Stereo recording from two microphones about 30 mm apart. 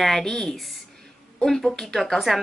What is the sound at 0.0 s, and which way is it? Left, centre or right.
Speech, centre.